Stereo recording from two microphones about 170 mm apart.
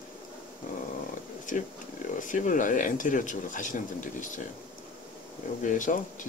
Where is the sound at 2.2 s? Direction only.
50° left (ahead or behind).